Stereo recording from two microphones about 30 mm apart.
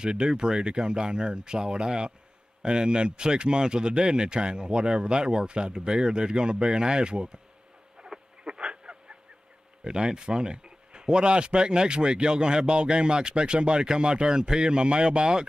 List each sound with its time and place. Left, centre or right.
0.0 s speech: right
8.1 s insect: centre
8.5 s a sound: right
10.1 s speech: right